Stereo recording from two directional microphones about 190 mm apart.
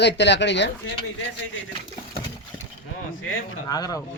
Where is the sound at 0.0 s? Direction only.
65° left (ahead or behind).